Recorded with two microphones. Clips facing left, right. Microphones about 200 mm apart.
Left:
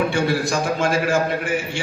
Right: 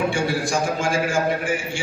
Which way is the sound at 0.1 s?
60° left (ahead or behind).